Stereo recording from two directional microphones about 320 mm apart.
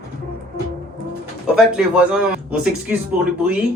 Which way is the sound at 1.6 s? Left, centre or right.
Centre.